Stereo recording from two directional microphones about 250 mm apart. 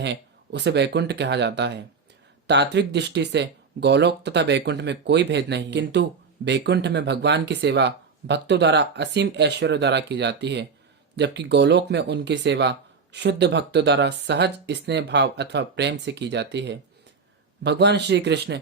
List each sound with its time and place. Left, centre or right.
0.0 s speech: right